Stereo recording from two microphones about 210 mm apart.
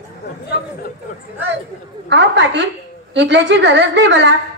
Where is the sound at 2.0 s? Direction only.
55° right (ahead or behind).